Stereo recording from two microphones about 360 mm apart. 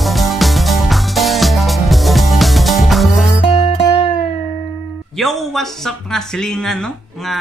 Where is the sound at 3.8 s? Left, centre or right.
Centre.